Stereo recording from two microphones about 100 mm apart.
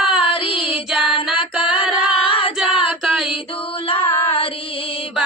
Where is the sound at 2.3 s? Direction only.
65° left (ahead or behind).